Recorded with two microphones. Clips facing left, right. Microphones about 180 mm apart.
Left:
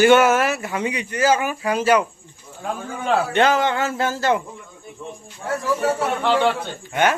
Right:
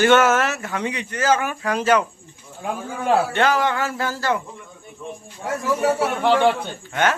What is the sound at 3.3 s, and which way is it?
Speech, 20° left (ahead or behind).